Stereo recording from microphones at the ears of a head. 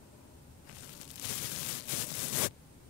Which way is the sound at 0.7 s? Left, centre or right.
Left.